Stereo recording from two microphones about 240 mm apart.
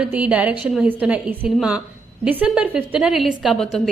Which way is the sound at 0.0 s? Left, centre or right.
Centre.